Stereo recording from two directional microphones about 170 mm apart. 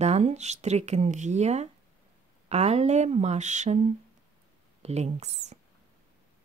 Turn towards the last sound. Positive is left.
turn(degrees=-40)  # may be behind; listen again after turning